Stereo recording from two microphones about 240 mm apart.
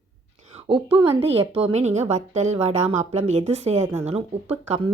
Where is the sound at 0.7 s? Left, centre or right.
Right.